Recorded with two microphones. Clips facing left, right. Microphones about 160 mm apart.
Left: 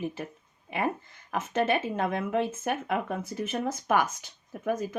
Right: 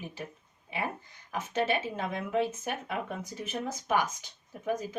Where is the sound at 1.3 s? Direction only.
55° left (ahead or behind).